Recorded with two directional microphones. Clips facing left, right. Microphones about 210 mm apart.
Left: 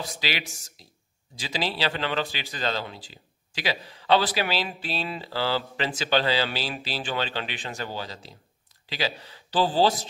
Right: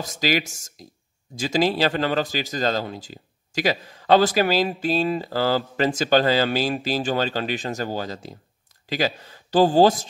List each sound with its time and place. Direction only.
0.0 s speech: 45° right (ahead or behind)